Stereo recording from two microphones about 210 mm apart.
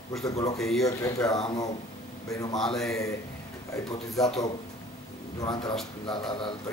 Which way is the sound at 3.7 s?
15° left (ahead or behind).